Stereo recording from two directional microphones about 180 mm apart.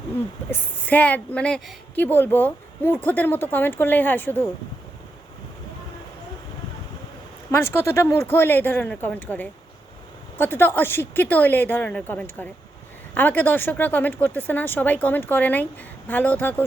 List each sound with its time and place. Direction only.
0.5 s a woman's voice: 10° left (ahead or behind)
7.5 s a woman's voice: 15° left (ahead or behind)